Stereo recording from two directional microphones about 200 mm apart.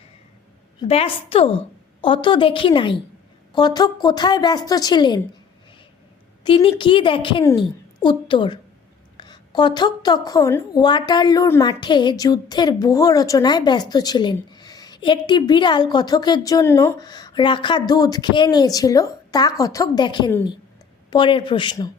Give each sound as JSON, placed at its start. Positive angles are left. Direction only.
{"t": 0.8, "sound": "a woman's voice", "side_deg": 30}
{"t": 6.4, "sound": "a woman's voice", "side_deg": 25}